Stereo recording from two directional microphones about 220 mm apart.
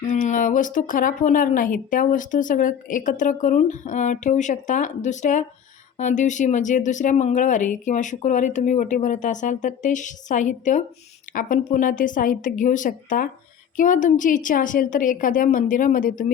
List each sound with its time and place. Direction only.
0.1 s a woman's voice: 35° left (ahead or behind)